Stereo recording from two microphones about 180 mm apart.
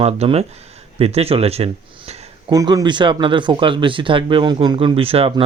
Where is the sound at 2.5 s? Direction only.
20° right (ahead or behind).